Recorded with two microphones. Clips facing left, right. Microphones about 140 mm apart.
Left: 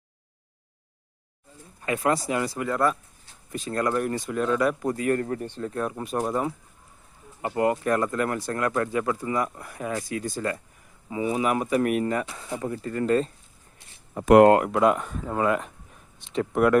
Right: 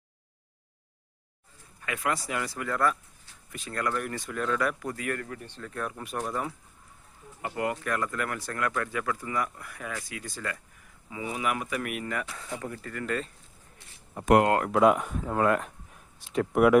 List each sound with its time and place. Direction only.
1.8 s speech: 30° left (ahead or behind)
10.0 s speech: 40° left (ahead or behind)
14.7 s speech: centre (ahead or behind)